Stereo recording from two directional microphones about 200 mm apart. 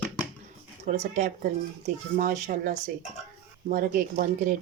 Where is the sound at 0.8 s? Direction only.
35° right (ahead or behind).